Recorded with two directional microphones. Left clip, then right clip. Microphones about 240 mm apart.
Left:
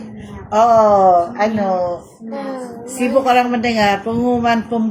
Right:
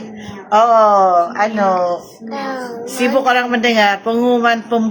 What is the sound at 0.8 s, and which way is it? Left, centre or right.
Speech, centre.